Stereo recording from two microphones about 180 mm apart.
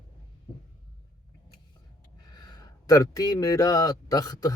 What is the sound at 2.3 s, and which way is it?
A man's voice, 20° left (ahead or behind).